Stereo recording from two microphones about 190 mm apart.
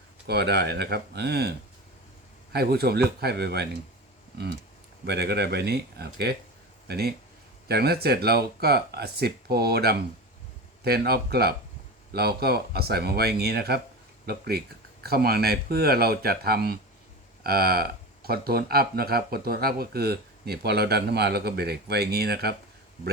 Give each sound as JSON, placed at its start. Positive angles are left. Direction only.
{"t": 0.3, "sound": "speech", "side_deg": -60}
{"t": 5.0, "sound": "speech", "side_deg": -60}